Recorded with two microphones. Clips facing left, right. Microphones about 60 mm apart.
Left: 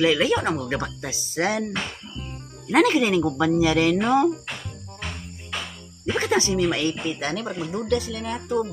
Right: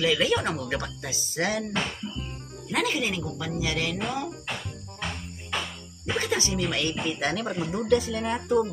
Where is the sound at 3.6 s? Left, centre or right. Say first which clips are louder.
Left 6 dB; left.